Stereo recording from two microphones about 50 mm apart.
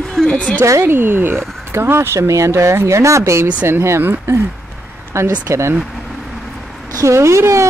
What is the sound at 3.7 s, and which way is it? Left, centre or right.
Speech, right.